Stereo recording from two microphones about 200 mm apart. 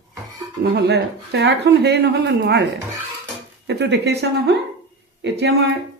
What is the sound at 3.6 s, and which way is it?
Speech, 60° right (ahead or behind).